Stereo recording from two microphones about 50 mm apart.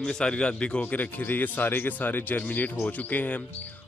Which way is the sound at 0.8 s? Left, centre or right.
Left.